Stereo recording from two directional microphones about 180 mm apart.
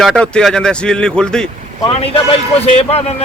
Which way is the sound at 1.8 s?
30° left (ahead or behind).